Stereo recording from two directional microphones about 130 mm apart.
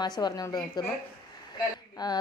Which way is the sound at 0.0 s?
30° left (ahead or behind).